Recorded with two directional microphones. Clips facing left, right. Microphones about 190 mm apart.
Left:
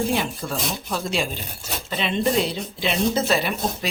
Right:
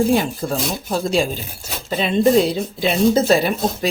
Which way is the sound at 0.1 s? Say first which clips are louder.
Right 6 dB; 40° right (ahead or behind).